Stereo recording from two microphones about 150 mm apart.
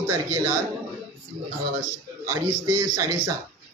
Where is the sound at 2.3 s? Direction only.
25° right (ahead or behind).